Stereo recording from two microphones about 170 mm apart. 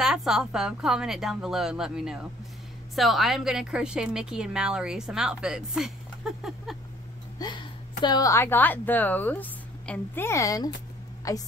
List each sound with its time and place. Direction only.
0.0 s a woman's voice: 5° right (ahead or behind)
7.3 s a sound: 25° left (ahead or behind)
8.0 s a woman's voice: 25° left (ahead or behind)